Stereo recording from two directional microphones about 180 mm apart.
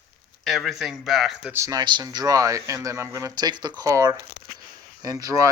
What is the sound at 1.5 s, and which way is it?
Speech, 20° right (ahead or behind).